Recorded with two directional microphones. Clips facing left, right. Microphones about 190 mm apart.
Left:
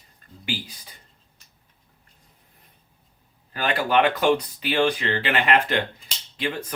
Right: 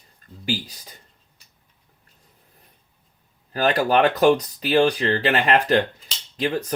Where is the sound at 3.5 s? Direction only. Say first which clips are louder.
Right 3 dB; 40° right (ahead or behind).